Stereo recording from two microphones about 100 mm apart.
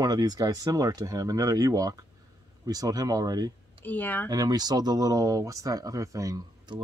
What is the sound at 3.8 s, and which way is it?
Speech, 20° left (ahead or behind).